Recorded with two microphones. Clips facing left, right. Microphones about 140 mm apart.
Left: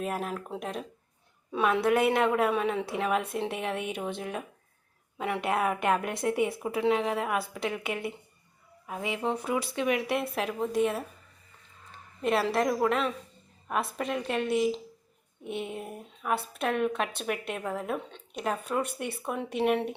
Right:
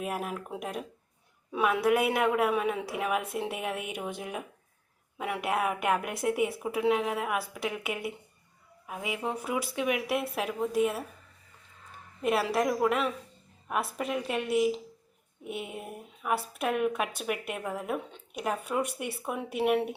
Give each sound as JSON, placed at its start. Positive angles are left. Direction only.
{"t": 0.0, "sound": "a woman's voice", "side_deg": -10}
{"t": 12.2, "sound": "a woman's voice", "side_deg": -5}